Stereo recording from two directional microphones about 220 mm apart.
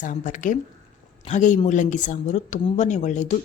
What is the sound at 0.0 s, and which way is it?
A woman's voice, 35° left (ahead or behind).